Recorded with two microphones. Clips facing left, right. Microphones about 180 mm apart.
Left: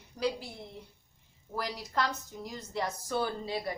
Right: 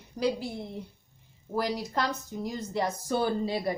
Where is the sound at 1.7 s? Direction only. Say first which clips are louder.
Right 3 dB; 30° right (ahead or behind).